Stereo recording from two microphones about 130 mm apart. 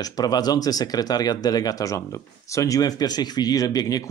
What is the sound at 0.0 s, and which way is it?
Speech, 30° left (ahead or behind).